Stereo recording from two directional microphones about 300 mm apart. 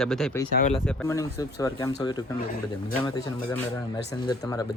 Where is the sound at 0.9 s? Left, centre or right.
Centre.